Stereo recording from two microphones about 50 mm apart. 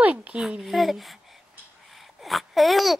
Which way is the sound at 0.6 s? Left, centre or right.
Centre.